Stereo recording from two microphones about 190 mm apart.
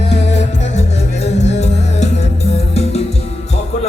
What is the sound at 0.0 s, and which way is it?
Music, 35° left (ahead or behind).